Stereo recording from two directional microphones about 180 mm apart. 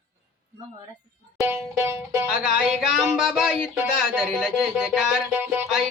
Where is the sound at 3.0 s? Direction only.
Centre (ahead or behind).